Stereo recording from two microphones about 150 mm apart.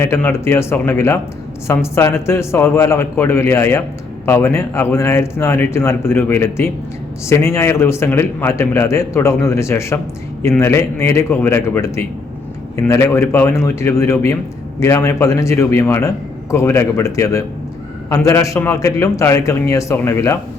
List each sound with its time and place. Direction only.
0.0 s a man's voice: 15° left (ahead or behind)